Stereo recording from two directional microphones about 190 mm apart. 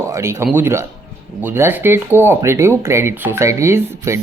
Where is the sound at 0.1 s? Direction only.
15° right (ahead or behind).